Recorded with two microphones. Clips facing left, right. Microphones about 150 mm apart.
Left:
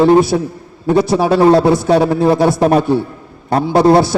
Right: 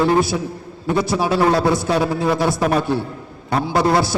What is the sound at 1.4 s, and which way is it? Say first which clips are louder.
A man's voice: left 8 dB; 30° left (ahead or behind).